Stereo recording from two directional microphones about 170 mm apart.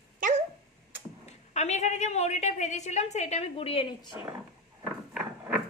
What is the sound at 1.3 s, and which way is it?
A woman's voice, 40° left (ahead or behind).